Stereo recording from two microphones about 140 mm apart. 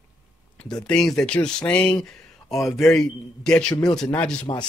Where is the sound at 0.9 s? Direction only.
5° left (ahead or behind).